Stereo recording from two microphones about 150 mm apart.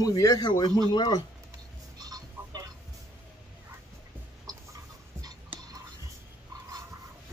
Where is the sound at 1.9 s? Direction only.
25° right (ahead or behind).